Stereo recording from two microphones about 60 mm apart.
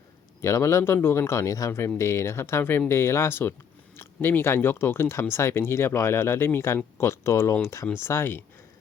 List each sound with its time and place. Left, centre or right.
0.4 s speech: left
7.9 s speech: left